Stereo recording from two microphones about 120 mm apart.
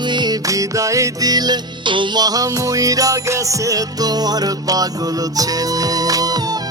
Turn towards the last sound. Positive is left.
turn(degrees=-35)  # may be behind; listen again after turning